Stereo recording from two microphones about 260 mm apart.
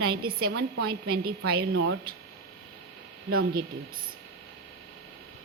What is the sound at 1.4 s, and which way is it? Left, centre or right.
Speech, right.